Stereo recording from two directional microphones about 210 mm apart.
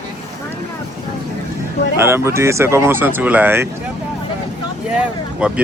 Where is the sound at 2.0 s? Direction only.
10° right (ahead or behind).